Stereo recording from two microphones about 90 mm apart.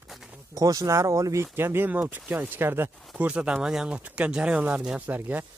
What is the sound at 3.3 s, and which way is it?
Speech, 15° right (ahead or behind).